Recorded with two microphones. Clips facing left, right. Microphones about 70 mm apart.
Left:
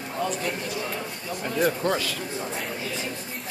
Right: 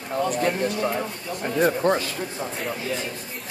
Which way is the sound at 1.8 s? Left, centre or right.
Right.